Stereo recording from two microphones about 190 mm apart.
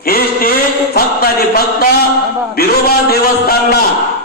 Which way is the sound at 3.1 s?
55° left (ahead or behind).